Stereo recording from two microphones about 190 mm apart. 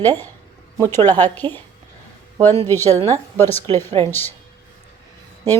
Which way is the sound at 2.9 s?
20° right (ahead or behind).